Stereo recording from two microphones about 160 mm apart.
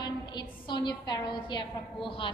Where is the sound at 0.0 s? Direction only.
25° left (ahead or behind).